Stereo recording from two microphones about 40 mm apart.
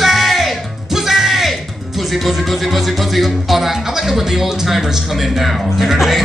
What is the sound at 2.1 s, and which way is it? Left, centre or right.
Speech, centre.